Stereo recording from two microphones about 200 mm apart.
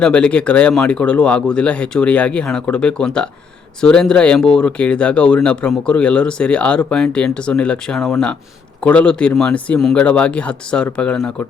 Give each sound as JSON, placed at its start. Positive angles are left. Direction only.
{"t": 0.0, "sound": "speech", "side_deg": 5}